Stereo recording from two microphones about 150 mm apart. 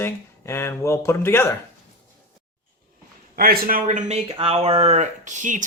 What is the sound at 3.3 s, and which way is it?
Speech, 80° right.